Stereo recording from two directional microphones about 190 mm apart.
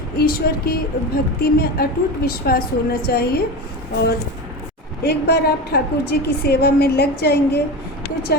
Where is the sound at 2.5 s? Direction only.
50° left (ahead or behind).